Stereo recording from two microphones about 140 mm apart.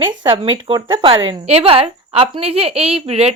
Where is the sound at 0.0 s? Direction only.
35° right (ahead or behind).